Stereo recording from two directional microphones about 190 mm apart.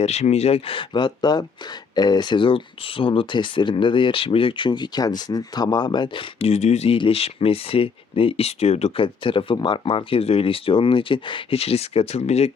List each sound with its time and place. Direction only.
0.0 s speech: 35° left (ahead or behind)